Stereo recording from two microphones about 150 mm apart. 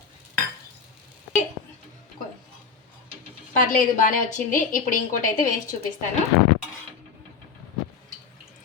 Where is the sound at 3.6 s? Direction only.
60° left (ahead or behind).